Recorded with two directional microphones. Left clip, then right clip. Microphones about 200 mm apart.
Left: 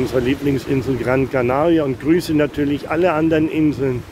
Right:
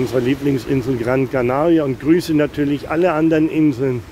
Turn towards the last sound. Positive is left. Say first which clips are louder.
# right 1 dB
turn(degrees=-20)  # may be behind; listen again after turning